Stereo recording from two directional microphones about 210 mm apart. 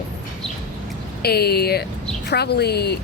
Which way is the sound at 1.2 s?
50° left (ahead or behind).